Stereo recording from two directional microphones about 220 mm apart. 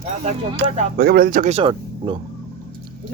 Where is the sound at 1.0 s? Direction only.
45° right (ahead or behind); by 2.2 s 20° right (ahead or behind).